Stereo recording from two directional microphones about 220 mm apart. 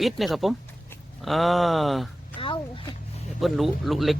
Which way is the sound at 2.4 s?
25° left (ahead or behind).